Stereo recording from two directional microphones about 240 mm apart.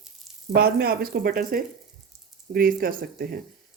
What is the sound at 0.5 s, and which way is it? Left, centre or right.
Speech, right.